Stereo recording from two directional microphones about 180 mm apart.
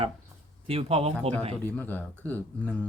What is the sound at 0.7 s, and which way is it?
Speech, 35° right (ahead or behind).